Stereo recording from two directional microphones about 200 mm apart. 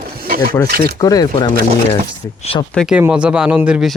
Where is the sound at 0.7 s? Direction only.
50° right (ahead or behind).